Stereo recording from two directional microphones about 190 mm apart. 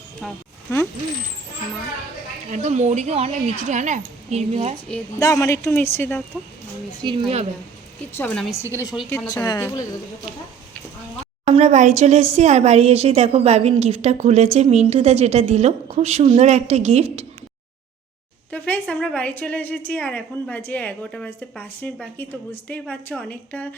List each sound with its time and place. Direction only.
0.7 s a woman's voice: 15° left (ahead or behind)
2.5 s speech: 35° right (ahead or behind)
5.2 s a woman's voice: 15° left (ahead or behind)
7.0 s a woman's voice: 25° right (ahead or behind)
8.1 s a woman's voice: 5° left (ahead or behind)
9.0 s a woman's voice: 15° left (ahead or behind)
11.4 s speech: 35° right (ahead or behind)
18.5 s a woman's voice: 5° left (ahead or behind)